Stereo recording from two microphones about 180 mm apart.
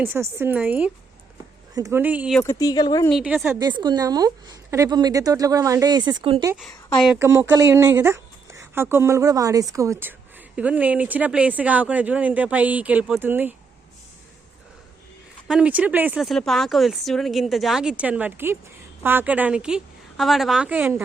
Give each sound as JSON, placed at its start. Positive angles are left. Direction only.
{"t": 0.0, "sound": "a woman's voice", "side_deg": -10}
{"t": 2.4, "sound": "speech", "side_deg": 20}
{"t": 3.1, "sound": "a woman's voice", "side_deg": -5}
{"t": 3.6, "sound": "a woman's voice", "side_deg": -25}
{"t": 7.2, "sound": "a woman's voice", "side_deg": -15}
{"t": 15.4, "sound": "a woman's voice", "side_deg": -5}